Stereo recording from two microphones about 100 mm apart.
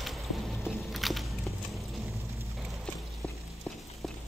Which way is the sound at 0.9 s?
Centre (ahead or behind).